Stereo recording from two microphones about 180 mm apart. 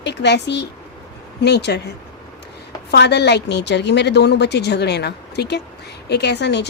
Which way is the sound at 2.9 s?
70° left (ahead or behind).